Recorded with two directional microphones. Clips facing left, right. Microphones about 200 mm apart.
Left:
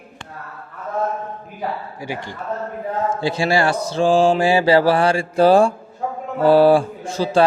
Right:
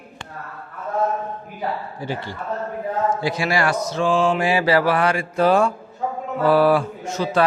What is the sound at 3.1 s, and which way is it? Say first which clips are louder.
Mantra: left 3 dB; 30° left (ahead or behind).